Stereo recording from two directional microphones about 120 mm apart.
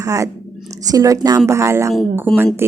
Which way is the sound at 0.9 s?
30° right (ahead or behind).